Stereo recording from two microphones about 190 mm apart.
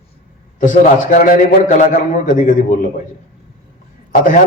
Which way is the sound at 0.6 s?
40° left (ahead or behind).